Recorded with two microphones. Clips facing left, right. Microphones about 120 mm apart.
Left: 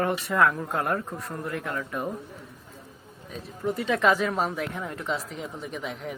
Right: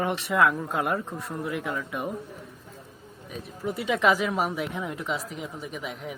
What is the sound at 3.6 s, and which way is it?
Speech, 5° right (ahead or behind).